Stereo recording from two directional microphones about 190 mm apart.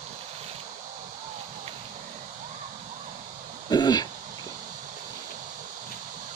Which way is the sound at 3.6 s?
20° left (ahead or behind).